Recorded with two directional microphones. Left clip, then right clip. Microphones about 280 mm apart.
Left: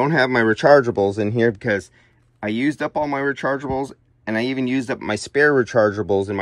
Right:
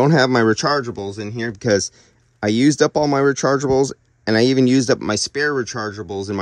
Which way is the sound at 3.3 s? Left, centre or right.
Right.